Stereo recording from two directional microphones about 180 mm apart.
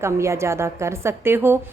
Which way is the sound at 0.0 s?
15° right (ahead or behind).